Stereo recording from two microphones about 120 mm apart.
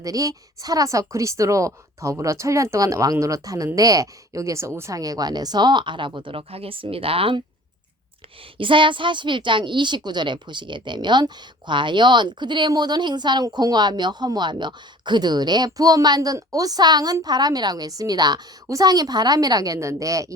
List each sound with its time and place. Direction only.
0.0 s a woman's voice: 30° right (ahead or behind); by 7.4 s 50° right (ahead or behind)
8.5 s a woman's voice: 45° right (ahead or behind); by 20.3 s 30° right (ahead or behind)